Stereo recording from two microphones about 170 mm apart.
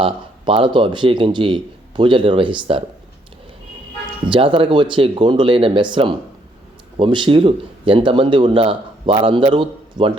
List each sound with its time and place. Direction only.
0.0 s speech: 30° right (ahead or behind)
4.3 s speech: 30° right (ahead or behind)